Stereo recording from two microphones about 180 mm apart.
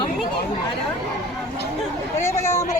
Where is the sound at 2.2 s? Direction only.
15° left (ahead or behind).